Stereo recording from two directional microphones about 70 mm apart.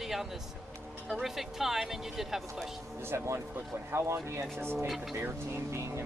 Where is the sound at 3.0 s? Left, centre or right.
Right.